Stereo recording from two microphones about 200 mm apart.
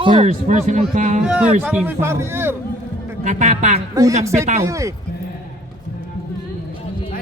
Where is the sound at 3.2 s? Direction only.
35° right (ahead or behind).